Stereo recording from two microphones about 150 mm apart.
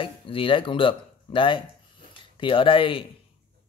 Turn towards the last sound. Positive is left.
turn(degrees=35)  # may be behind; listen again after turning